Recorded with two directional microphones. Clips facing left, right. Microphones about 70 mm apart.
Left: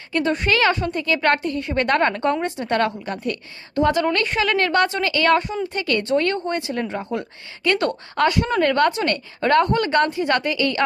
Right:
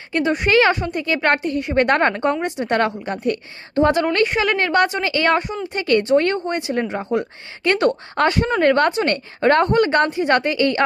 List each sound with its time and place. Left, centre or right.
0.1 s a woman's voice: centre